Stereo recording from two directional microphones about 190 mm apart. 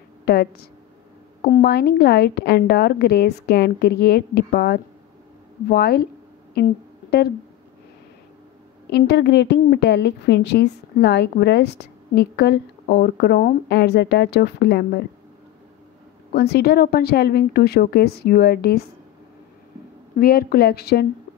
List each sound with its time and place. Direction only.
0.2 s a woman's voice: 55° left (ahead or behind)
6.5 s humming: 55° left (ahead or behind)
8.9 s a woman's voice: 60° left (ahead or behind)
16.3 s a woman's voice: 60° left (ahead or behind)
20.2 s a woman's voice: 50° left (ahead or behind)